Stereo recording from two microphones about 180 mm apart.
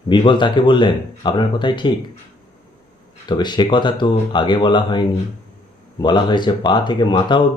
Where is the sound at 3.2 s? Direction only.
25° left (ahead or behind).